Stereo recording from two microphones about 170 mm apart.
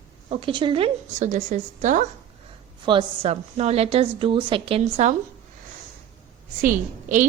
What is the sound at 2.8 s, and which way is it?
A woman's voice, 35° right (ahead or behind).